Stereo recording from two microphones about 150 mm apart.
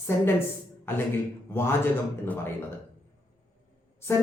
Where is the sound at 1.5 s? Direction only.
15° left (ahead or behind).